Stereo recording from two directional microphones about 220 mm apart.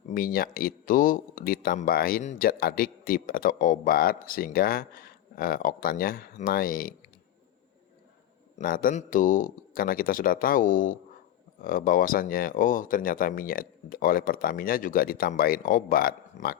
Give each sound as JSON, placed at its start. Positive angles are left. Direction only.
{"t": 0.1, "sound": "speech", "side_deg": 40}
{"t": 8.5, "sound": "speech", "side_deg": 40}